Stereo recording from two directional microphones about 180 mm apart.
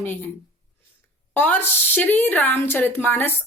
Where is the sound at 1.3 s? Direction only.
10° left (ahead or behind).